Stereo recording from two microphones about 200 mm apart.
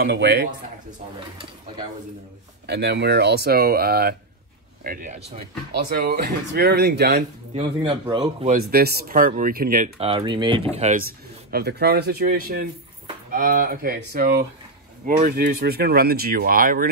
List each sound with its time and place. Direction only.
0.0 s a man's voice: 55° right (ahead or behind)
2.6 s speech: 55° right (ahead or behind); by 5.4 s 35° right (ahead or behind)
5.7 s speech: 50° right (ahead or behind)
7.5 s speech: 25° right (ahead or behind)
8.6 s speech: 50° right (ahead or behind)
9.9 s speech: 25° right (ahead or behind)
11.0 s speech: 50° right (ahead or behind)